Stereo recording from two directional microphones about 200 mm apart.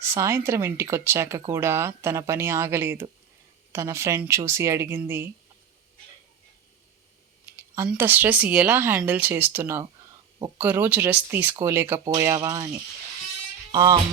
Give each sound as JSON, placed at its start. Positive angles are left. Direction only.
{"t": 0.0, "sound": "speech", "side_deg": -15}
{"t": 7.4, "sound": "speech", "side_deg": -15}
{"t": 13.7, "sound": "speech", "side_deg": -20}